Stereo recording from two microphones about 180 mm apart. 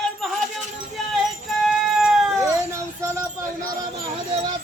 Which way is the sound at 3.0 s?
15° right (ahead or behind).